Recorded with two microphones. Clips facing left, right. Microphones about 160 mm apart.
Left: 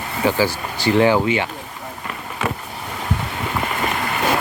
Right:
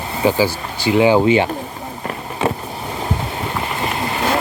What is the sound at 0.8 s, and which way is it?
Speech, 10° right (ahead or behind).